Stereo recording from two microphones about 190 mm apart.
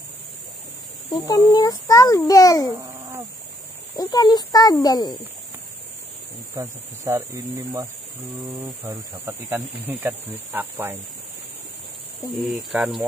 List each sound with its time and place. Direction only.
1.1 s a child's voice: 20° left (ahead or behind)
2.7 s a sound: 20° right (ahead or behind)
3.9 s a child's voice: 20° left (ahead or behind)
6.5 s speech: 20° right (ahead or behind)
12.4 s speech: centre (ahead or behind)